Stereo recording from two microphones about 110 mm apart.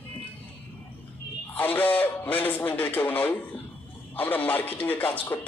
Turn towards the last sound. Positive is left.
turn(degrees=15)  # may be behind; listen again after turning